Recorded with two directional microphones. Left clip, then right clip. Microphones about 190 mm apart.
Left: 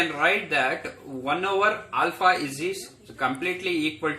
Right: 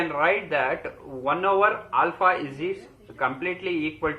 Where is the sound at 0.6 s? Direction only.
90° left.